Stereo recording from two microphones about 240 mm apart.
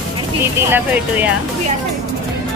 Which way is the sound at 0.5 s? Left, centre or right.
Centre.